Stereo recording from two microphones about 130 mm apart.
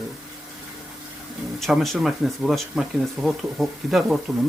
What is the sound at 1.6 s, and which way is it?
Speech, centre (ahead or behind).